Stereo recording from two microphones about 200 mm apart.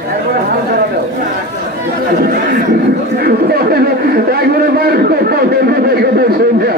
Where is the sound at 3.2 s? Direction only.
50° right (ahead or behind).